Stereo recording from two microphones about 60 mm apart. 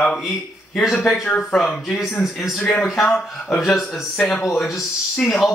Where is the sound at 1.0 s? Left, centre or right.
Centre.